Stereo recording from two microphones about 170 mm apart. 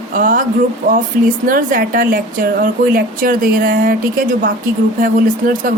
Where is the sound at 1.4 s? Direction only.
55° right (ahead or behind).